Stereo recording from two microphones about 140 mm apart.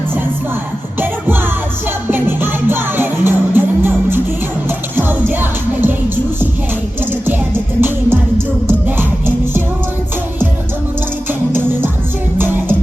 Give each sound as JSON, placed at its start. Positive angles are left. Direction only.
{"t": 2.0, "sound": "music", "side_deg": -15}
{"t": 7.0, "sound": "music", "side_deg": -15}
{"t": 11.3, "sound": "music", "side_deg": -15}